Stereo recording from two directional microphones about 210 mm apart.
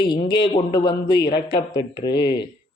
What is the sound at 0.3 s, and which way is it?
A man's voice, 20° left (ahead or behind).